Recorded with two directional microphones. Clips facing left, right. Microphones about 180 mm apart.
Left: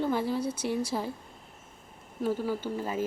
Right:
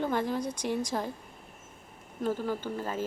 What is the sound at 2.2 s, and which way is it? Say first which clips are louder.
Speech: left 1 dB; 10° left (ahead or behind).